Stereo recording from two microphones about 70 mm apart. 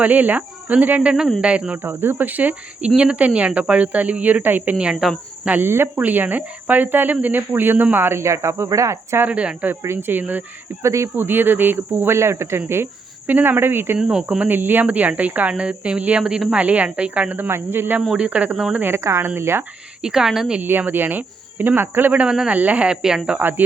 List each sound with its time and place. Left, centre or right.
0.0 s speech: right
1.8 s speech: right; by 4.9 s centre
5.5 s speech: right
9.2 s speech: centre
9.8 s speech: right
10.8 s speech: right
11.2 s speech: right
14.0 s speech: centre
14.3 s speech: right
18.2 s speech: centre
18.8 s speech: right
20.0 s speech: centre
20.6 s speech: right; by 23.4 s centre
23.4 s speech: right